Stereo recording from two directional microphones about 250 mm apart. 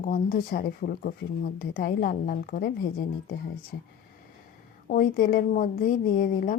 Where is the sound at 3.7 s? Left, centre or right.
Left.